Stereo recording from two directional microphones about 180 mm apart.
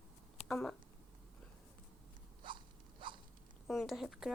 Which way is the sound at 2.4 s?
25° right (ahead or behind).